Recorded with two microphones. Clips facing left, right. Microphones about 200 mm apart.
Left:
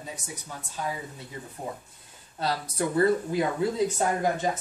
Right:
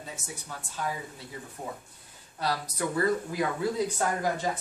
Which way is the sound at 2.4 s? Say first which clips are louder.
Left 2 dB; 25° left (ahead or behind).